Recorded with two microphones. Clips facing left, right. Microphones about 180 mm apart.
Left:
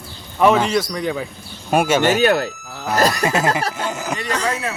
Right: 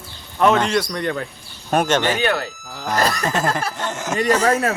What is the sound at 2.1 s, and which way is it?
Speech, 40° left (ahead or behind).